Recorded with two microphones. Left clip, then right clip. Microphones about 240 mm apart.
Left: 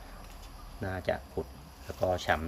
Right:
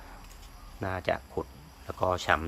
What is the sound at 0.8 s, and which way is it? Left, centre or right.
Speech, centre.